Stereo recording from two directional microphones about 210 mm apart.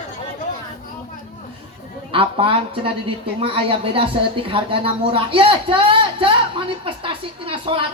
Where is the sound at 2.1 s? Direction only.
25° right (ahead or behind).